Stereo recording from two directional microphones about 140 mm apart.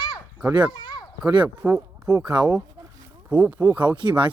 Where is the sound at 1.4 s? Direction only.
10° right (ahead or behind).